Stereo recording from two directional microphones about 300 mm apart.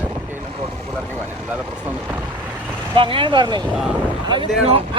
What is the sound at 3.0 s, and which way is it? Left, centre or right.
Speech, centre.